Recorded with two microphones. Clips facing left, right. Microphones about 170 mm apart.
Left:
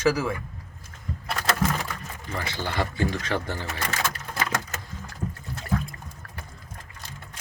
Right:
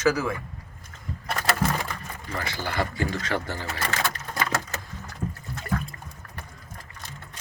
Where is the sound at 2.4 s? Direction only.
20° left (ahead or behind).